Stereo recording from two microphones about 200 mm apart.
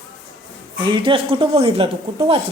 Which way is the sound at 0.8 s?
25° right (ahead or behind).